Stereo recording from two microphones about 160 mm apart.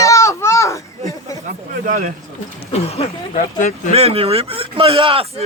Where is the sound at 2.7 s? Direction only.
40° left (ahead or behind).